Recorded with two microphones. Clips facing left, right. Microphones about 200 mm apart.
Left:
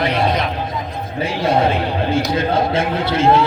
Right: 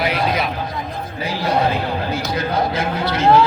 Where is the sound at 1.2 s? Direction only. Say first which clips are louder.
Left 3 dB; 25° left (ahead or behind).